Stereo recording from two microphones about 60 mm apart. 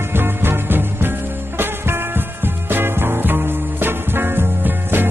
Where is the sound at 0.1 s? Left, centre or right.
Right.